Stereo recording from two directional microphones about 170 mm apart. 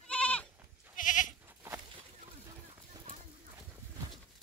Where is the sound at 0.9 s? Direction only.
50° left (ahead or behind).